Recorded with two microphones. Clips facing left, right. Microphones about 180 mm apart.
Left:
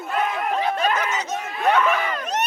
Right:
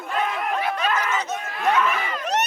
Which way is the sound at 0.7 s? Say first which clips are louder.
Left 2 dB; 30° left (ahead or behind).